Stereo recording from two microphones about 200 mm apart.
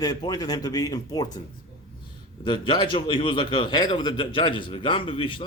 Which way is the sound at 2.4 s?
25° left (ahead or behind).